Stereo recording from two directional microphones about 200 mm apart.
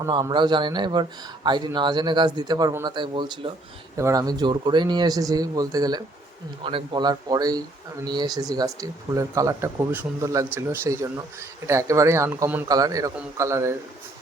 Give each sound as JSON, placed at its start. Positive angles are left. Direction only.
{"t": 0.0, "sound": "a man's voice", "side_deg": -20}